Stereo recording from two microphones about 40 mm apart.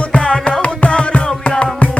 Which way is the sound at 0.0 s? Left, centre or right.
Left.